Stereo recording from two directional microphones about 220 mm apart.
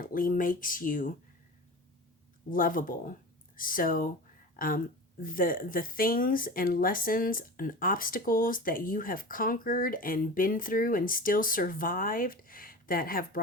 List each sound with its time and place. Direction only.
0.0 s speech: 40° left (ahead or behind)
2.5 s speech: 40° left (ahead or behind)